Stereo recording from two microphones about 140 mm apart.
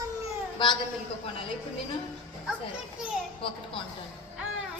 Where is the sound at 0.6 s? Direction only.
35° left (ahead or behind).